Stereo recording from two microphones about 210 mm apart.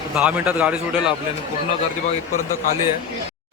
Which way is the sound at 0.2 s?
5° right (ahead or behind).